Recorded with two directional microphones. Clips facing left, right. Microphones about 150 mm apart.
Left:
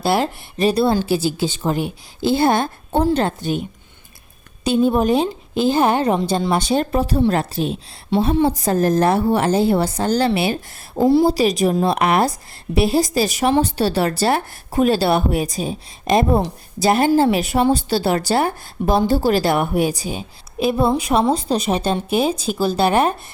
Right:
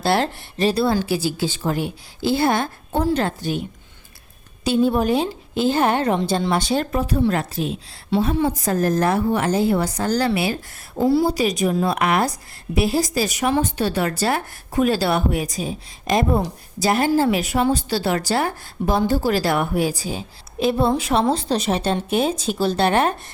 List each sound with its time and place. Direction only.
0.0 s a woman's voice: 10° left (ahead or behind)
4.6 s a woman's voice: 20° left (ahead or behind)